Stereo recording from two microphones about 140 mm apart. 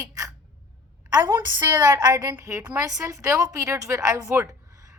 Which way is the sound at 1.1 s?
25° right (ahead or behind).